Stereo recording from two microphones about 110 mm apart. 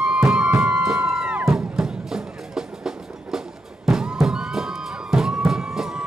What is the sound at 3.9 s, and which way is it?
Crowd, 5° right (ahead or behind).